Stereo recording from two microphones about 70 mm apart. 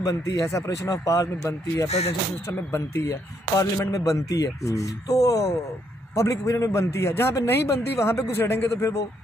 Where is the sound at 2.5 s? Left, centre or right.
Left.